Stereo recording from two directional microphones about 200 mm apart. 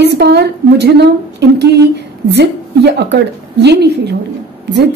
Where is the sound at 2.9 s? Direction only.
60° right (ahead or behind).